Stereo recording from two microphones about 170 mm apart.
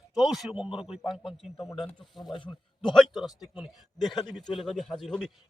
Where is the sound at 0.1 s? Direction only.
Centre (ahead or behind).